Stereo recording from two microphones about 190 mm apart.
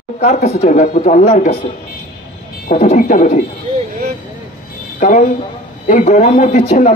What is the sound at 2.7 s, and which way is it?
Speech, 40° left (ahead or behind).